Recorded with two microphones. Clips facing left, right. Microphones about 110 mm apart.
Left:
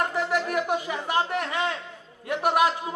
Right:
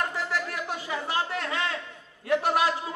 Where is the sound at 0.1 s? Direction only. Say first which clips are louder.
Left 6 dB; 20° left (ahead or behind).